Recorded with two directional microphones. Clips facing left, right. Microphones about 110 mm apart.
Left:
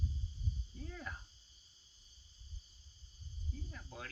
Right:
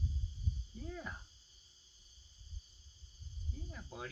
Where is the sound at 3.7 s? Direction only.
20° right (ahead or behind).